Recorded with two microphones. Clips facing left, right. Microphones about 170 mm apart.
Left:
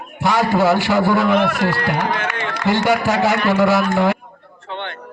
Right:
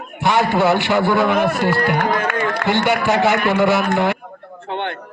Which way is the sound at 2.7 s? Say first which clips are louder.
Left 2 dB; 40° left (ahead or behind).